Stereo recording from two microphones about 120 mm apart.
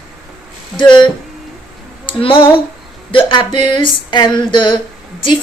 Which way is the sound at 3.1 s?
40° left (ahead or behind).